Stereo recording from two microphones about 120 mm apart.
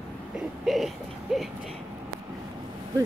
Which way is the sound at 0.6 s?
Centre (ahead or behind).